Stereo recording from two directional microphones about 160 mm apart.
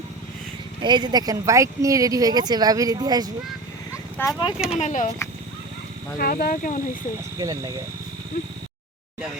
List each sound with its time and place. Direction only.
0.8 s speech: 30° right (ahead or behind)
4.4 s speech: 30° left (ahead or behind)
4.8 s speech: 50° left (ahead or behind)
6.1 s speech: 65° left (ahead or behind)
7.3 s speech: 20° right (ahead or behind)